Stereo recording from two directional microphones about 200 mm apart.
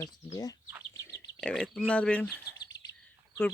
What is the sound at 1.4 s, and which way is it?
Speech, 5° left (ahead or behind).